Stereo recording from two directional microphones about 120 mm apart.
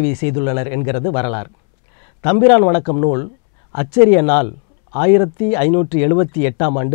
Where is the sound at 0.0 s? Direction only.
10° left (ahead or behind).